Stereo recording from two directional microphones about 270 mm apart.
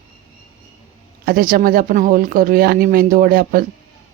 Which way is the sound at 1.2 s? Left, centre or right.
Right.